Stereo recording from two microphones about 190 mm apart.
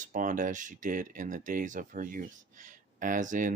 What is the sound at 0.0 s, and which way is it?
Speech, 45° right (ahead or behind).